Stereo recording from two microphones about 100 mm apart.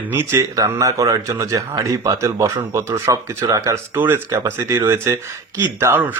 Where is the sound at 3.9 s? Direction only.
20° right (ahead or behind).